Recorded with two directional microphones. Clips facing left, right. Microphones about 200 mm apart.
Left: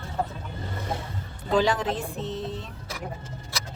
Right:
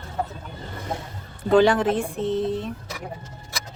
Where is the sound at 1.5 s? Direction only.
55° right (ahead or behind).